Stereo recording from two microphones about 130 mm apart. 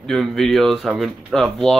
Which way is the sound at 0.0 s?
Centre (ahead or behind).